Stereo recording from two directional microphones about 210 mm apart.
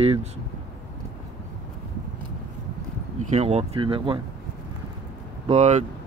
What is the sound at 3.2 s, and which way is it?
Speech, 30° right (ahead or behind).